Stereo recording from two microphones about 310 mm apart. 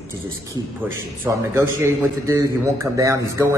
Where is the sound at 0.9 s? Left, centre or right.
Centre.